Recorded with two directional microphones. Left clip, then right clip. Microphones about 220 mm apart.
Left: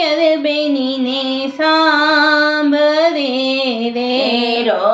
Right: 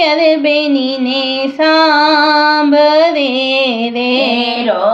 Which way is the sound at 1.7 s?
35° right (ahead or behind).